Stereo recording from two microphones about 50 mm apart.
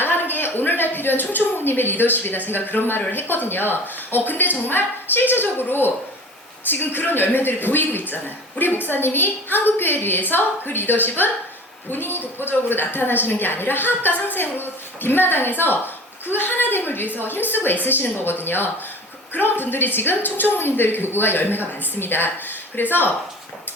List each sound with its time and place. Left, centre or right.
0.0 s a woman's voice: left